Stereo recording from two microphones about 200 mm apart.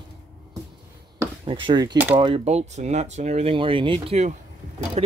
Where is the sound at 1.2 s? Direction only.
25° right (ahead or behind).